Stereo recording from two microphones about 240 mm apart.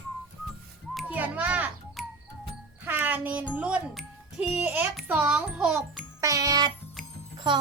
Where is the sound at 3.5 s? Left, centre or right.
Centre.